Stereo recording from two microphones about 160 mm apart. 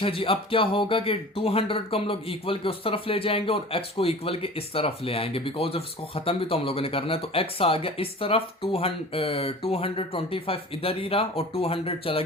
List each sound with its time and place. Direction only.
0.0 s speech: 35° left (ahead or behind)